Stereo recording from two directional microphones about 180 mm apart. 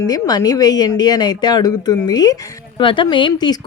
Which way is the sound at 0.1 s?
20° left (ahead or behind).